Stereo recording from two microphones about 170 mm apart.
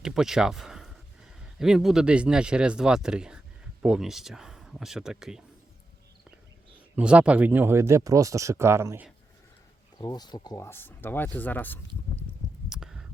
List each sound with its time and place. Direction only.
0.0 s speech: centre (ahead or behind)
6.9 s speech: 5° right (ahead or behind)
10.0 s speech: 25° left (ahead or behind)
12.6 s a sound: 5° right (ahead or behind)